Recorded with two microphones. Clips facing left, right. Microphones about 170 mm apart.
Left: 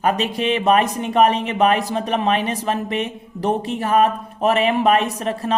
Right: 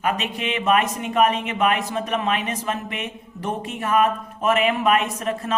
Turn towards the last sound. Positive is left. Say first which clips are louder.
# left 3 dB
turn(degrees=35)  # may be behind; listen again after turning